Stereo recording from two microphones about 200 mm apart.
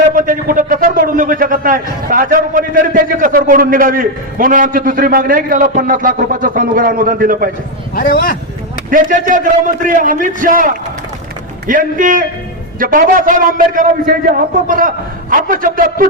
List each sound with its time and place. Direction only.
0.1 s a man's voice: 45° right (ahead or behind)
7.9 s speech: 45° left (ahead or behind)
8.9 s a man's voice: 40° right (ahead or behind)